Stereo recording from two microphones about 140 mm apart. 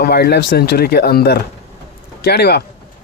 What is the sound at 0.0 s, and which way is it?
Speech, 90° left.